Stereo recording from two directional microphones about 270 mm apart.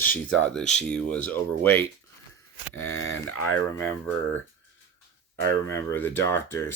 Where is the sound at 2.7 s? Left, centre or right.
Left.